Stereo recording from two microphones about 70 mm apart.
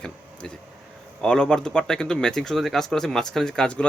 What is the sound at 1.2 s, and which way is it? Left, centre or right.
Speech, centre.